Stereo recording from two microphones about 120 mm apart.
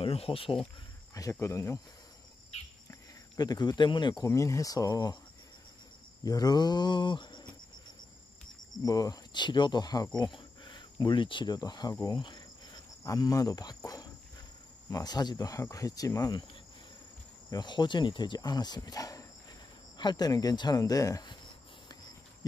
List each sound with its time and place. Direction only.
0.0 s speech: 50° left (ahead or behind)
1.3 s speech: 25° left (ahead or behind)
2.9 s speech: 35° left (ahead or behind)
6.2 s cricket: 30° left (ahead or behind)
8.8 s speech: 30° left (ahead or behind)
10.1 s cricket: 35° left (ahead or behind)
11.9 s speech: 25° left (ahead or behind)
12.2 s cricket: 40° left (ahead or behind)
14.9 s speech: 30° left (ahead or behind)
17.5 s speech: 35° left (ahead or behind)